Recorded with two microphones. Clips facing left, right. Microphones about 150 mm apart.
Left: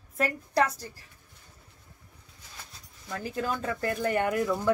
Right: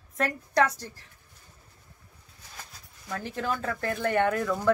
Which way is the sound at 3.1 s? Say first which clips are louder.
Even; 10° left (ahead or behind).